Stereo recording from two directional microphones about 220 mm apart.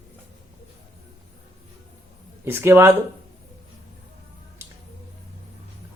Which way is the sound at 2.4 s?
10° right (ahead or behind).